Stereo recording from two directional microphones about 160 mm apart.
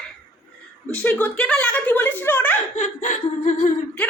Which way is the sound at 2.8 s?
55° left (ahead or behind).